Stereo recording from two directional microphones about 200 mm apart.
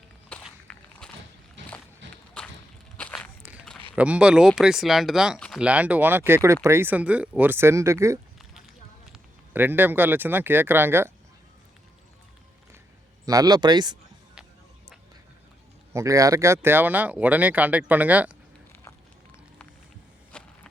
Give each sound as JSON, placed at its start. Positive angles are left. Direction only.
{"t": 0.3, "sound": "walk", "side_deg": 5}
{"t": 1.6, "sound": "a sound", "side_deg": -65}
{"t": 3.0, "sound": "walk", "side_deg": 5}
{"t": 3.9, "sound": "speech", "side_deg": -5}
{"t": 13.2, "sound": "speech", "side_deg": -20}
{"t": 15.9, "sound": "speech", "side_deg": -15}
{"t": 20.3, "sound": "insect", "side_deg": 5}